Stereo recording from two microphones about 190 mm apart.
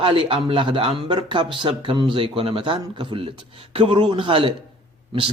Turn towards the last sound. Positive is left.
turn(degrees=-25)  # may be behind; listen again after turning